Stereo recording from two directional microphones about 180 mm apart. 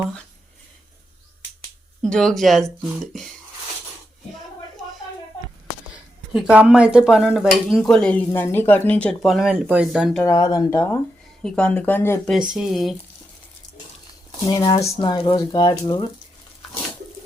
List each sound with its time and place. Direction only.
2.0 s speech: 5° left (ahead or behind)
6.3 s speech: 5° right (ahead or behind)
10.2 s speech: 20° left (ahead or behind)
12.5 s speech: centre (ahead or behind)
14.4 s speech: 20° left (ahead or behind)